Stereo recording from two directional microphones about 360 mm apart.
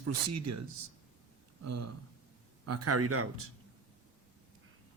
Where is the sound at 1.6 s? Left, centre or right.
Right.